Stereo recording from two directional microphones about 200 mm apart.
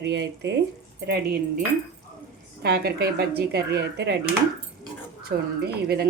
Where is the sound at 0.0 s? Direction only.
60° right (ahead or behind).